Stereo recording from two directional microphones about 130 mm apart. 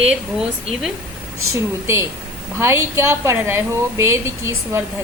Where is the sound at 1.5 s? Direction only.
20° right (ahead or behind).